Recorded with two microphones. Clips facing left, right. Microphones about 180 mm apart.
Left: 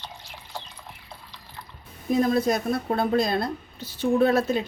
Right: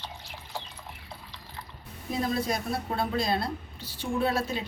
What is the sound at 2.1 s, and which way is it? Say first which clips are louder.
A woman's voice: left 7 dB; 50° left (ahead or behind).